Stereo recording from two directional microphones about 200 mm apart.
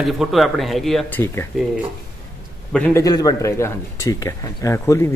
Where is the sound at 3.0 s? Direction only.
20° left (ahead or behind).